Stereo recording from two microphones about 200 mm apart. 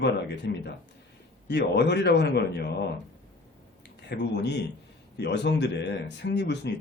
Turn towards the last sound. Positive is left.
turn(degrees=60)  # may be behind; listen again after turning